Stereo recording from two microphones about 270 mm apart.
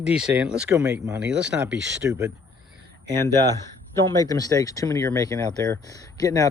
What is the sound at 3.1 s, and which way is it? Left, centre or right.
Speech, centre.